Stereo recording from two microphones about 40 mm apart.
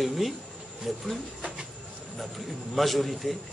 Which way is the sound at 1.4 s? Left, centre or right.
Centre.